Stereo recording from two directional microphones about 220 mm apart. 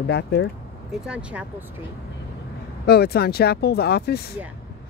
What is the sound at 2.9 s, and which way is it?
Speech, 45° left (ahead or behind).